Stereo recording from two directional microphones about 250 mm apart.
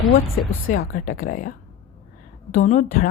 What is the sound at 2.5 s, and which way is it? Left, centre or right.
Speech, left.